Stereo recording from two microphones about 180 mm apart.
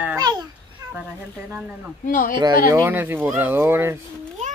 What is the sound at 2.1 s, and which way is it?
Speech, 50° left (ahead or behind).